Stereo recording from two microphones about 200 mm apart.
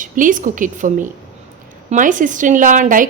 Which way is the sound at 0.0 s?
40° right (ahead or behind).